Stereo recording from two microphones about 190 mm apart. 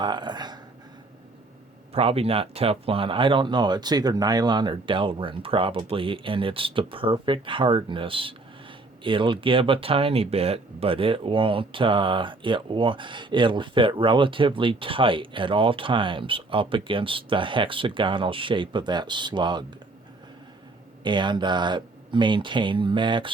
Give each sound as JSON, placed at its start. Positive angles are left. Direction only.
{"t": 0.0, "sound": "speech", "side_deg": -20}
{"t": 1.9, "sound": "speech", "side_deg": -30}
{"t": 21.0, "sound": "speech", "side_deg": -25}